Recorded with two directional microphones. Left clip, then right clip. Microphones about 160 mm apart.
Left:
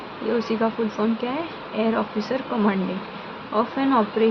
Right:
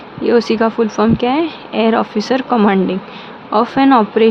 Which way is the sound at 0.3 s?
90° right.